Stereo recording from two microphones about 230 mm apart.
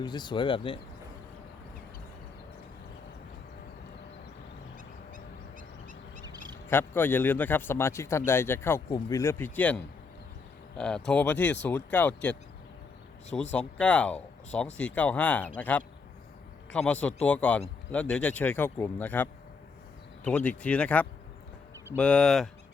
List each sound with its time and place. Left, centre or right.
0.0 s speech: centre
6.7 s speech: centre